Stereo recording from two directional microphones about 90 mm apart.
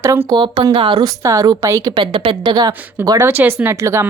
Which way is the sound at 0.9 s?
40° right (ahead or behind).